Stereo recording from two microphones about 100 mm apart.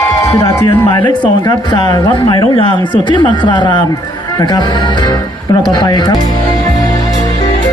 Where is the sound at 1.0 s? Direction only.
45° left (ahead or behind).